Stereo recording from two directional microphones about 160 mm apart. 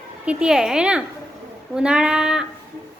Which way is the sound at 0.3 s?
5° right (ahead or behind).